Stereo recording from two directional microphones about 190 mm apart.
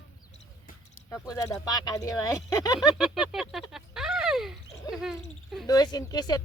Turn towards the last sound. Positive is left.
turn(degrees=20)  # may be behind; listen again after turning